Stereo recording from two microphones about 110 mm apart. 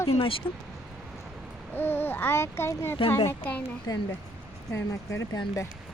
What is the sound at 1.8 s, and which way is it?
A child's voice, 20° left (ahead or behind).